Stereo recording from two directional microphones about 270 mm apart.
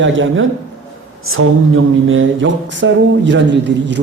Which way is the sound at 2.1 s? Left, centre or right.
Right.